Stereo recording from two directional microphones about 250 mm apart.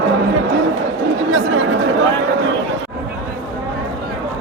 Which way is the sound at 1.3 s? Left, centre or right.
Right.